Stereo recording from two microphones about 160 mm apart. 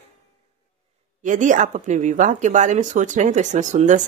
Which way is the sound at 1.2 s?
50° right (ahead or behind).